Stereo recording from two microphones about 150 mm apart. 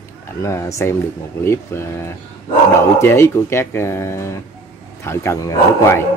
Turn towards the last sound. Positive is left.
turn(degrees=20)  # may be behind; listen again after turning